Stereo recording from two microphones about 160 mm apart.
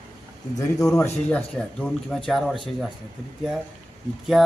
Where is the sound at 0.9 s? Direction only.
15° left (ahead or behind).